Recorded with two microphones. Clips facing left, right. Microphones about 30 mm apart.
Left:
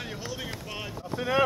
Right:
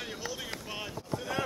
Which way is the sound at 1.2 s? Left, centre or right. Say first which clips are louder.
Left 11 dB; left.